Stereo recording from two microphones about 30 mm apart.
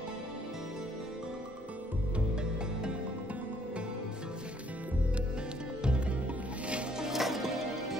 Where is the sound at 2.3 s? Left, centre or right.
Right.